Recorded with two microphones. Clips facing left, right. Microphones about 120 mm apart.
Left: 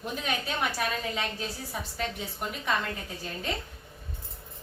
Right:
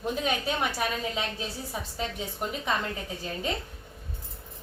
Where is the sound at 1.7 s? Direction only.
25° right (ahead or behind).